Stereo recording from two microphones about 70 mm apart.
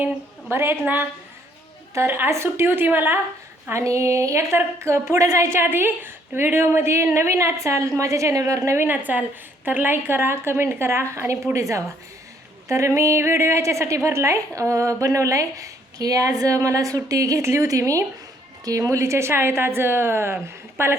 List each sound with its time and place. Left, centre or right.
0.5 s a woman's voice: right
2.0 s a woman's voice: right
3.7 s a woman's voice: right
8.7 s a woman's voice: right